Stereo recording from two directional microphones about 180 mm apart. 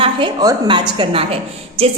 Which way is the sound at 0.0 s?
25° right (ahead or behind).